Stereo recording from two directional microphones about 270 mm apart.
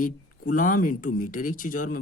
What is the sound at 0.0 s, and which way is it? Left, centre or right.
Speech, left.